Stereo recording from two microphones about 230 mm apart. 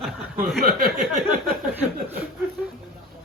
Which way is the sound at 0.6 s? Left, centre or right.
Right.